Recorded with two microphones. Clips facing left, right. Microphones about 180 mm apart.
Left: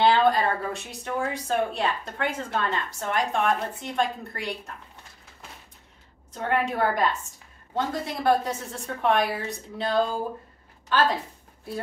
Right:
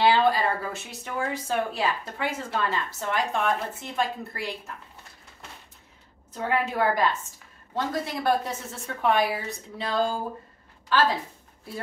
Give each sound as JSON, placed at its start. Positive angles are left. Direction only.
{"t": 0.0, "sound": "speech", "side_deg": -5}
{"t": 6.3, "sound": "a woman's voice", "side_deg": -5}